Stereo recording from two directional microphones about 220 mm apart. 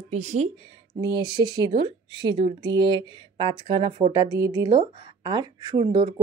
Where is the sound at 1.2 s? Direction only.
20° right (ahead or behind).